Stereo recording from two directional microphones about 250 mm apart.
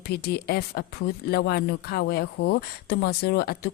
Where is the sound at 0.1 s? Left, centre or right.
Left.